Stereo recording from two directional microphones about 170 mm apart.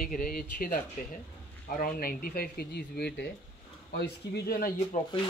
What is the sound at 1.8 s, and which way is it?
A man's voice, 60° left (ahead or behind).